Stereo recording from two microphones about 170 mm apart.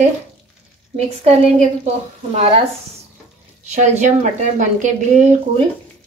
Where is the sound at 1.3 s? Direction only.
35° right (ahead or behind).